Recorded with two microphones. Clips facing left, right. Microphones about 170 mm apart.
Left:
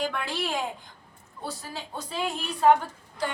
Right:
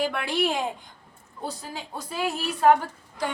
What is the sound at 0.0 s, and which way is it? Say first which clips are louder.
A woman's voice: right 5 dB; 10° right (ahead or behind).